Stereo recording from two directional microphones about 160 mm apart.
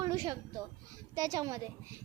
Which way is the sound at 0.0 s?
25° right (ahead or behind).